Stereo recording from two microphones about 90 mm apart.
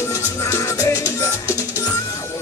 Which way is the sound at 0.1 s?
35° left (ahead or behind).